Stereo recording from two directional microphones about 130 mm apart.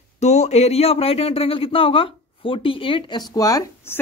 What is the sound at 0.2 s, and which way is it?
A man's voice, 60° left (ahead or behind).